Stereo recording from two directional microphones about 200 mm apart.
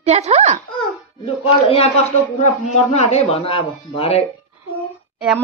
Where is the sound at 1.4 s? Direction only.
30° left (ahead or behind).